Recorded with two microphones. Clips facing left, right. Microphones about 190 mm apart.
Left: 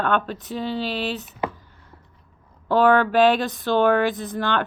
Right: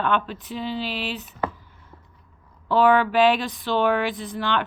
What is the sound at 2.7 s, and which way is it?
A woman's voice, 45° left (ahead or behind).